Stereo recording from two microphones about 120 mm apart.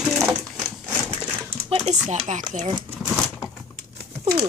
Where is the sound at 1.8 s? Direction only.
65° right (ahead or behind); by 2.7 s 90° right.